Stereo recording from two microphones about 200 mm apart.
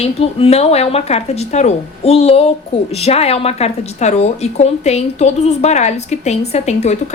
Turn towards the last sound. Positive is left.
turn(degrees=35)  # may be behind; listen again after turning